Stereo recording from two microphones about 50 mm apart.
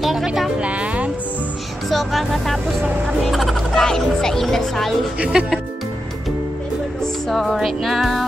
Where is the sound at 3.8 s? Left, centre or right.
Centre.